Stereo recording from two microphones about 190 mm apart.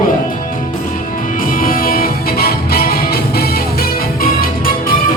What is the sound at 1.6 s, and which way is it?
Music, 50° left (ahead or behind).